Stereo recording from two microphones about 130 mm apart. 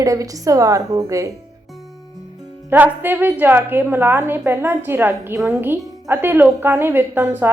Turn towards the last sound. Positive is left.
turn(degrees=-15)  # may be behind; listen again after turning